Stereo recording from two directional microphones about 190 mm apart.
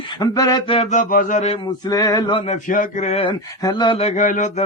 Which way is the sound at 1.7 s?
20° left (ahead or behind).